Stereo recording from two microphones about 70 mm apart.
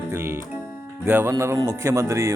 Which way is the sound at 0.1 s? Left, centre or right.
Right.